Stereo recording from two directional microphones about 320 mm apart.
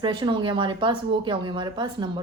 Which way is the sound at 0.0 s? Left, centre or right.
Centre.